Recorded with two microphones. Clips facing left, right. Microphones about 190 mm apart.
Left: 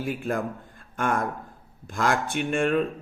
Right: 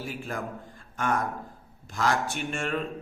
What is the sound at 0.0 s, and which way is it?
A man's voice, 55° left (ahead or behind).